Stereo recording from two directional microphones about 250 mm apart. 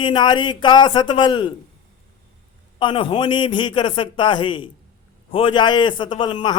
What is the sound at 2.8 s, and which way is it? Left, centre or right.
A man's voice, centre.